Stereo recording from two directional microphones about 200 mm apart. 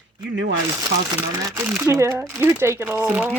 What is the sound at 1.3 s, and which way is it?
Speech, 15° right (ahead or behind).